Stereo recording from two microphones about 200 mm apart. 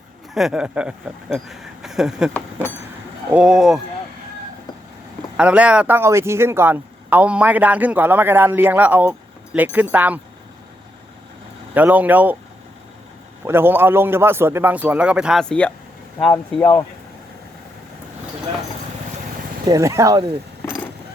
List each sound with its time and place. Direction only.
0.3 s speech: 5° right (ahead or behind)
2.3 s speech: 10° left (ahead or behind)
3.3 s speech: 5° right (ahead or behind)
5.4 s a man's voice: 5° right (ahead or behind)
11.7 s a man's voice: 10° right (ahead or behind)
13.4 s a man's voice: 10° right (ahead or behind); by 16.8 s 10° left (ahead or behind)
19.6 s speech: 15° right (ahead or behind)
20.6 s vehicle: 15° left (ahead or behind)